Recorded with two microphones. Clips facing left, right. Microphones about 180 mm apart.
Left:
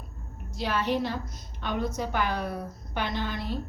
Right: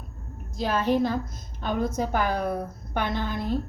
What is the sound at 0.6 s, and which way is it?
A woman's voice, 45° right (ahead or behind).